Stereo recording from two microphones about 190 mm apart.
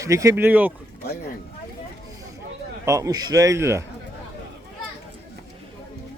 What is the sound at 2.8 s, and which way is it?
Speech, 15° right (ahead or behind).